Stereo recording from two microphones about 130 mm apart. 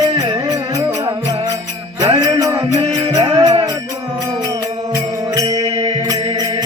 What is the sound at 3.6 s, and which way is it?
Music, 30° right (ahead or behind).